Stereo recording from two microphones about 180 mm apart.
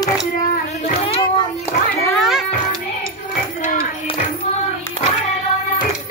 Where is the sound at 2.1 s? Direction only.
Centre (ahead or behind).